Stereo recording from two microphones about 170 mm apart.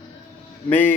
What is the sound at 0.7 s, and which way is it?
Speech, 10° left (ahead or behind).